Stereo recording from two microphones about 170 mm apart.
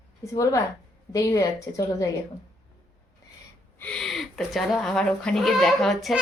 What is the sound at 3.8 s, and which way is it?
Speech, 5° left (ahead or behind).